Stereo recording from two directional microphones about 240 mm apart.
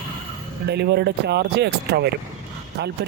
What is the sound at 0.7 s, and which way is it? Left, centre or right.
Speech, right.